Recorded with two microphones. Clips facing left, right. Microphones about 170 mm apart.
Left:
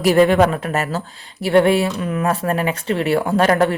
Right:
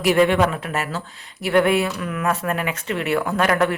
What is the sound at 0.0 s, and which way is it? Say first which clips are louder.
Speech: left 4 dB; 35° left (ahead or behind).